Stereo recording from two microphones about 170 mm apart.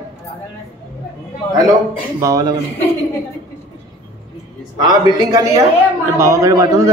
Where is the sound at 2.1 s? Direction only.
20° right (ahead or behind).